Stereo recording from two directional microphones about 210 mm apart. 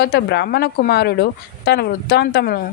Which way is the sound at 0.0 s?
50° left (ahead or behind).